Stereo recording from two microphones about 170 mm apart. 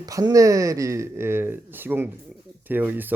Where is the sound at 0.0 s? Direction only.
20° right (ahead or behind).